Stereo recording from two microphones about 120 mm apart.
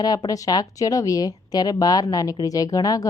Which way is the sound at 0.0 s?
35° left (ahead or behind).